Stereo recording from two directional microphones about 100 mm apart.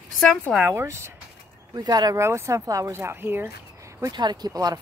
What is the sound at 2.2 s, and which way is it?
Speech, 30° right (ahead or behind).